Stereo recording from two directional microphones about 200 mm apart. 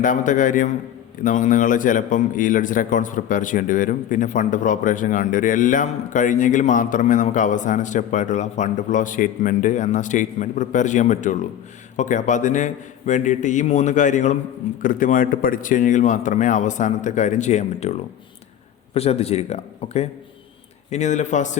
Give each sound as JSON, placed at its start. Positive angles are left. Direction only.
{"t": 0.0, "sound": "a man's voice", "side_deg": 40}
{"t": 18.9, "sound": "a man's voice", "side_deg": 30}